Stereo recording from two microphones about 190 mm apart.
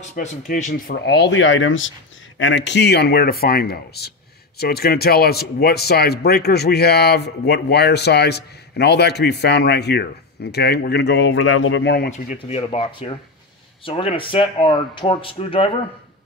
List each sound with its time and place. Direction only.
0.1 s speech: 40° left (ahead or behind); by 1.9 s 90° left
2.3 s speech: 75° left (ahead or behind)
12.4 s speech: 30° left (ahead or behind)